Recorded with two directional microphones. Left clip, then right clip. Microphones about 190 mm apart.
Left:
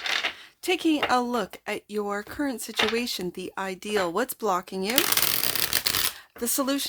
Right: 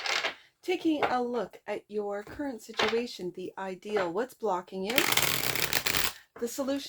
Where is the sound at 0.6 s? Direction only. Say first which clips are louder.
Left 4 dB; 40° left (ahead or behind).